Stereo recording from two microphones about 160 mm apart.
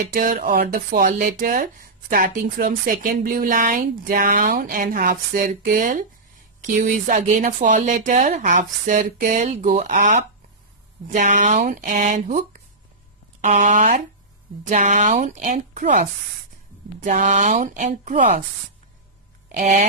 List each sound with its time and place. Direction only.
0.1 s speech: 60° right (ahead or behind)